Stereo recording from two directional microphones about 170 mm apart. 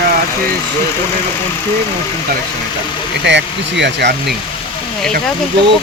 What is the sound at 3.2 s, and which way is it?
Speech, 90° right.